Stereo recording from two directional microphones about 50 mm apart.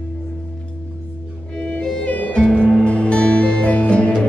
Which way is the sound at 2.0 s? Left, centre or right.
Left.